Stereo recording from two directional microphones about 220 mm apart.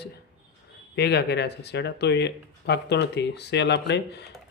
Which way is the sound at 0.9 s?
50° left (ahead or behind).